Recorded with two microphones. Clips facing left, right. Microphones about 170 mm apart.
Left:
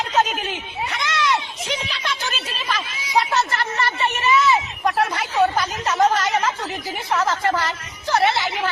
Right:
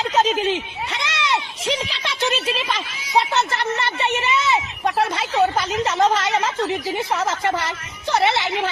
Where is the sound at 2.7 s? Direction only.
25° right (ahead or behind).